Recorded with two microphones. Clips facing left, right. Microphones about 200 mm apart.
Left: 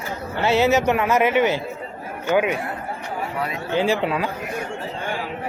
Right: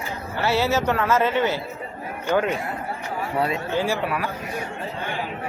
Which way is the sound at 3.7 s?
20° left (ahead or behind).